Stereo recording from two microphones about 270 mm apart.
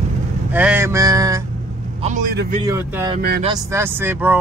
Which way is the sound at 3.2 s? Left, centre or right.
Right.